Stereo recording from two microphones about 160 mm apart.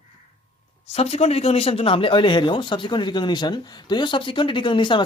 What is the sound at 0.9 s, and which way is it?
Speech, 40° left (ahead or behind).